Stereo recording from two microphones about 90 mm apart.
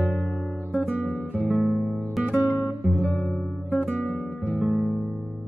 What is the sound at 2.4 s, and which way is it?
Guitar, 30° left (ahead or behind).